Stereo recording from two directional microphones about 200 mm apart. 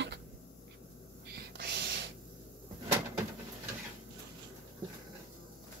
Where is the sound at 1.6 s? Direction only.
55° right (ahead or behind).